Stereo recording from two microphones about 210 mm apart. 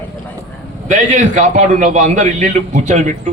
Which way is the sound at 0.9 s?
35° right (ahead or behind).